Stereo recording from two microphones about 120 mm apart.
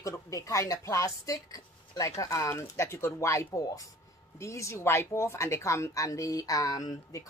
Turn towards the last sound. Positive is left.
turn(degrees=30)  # may be behind; listen again after turning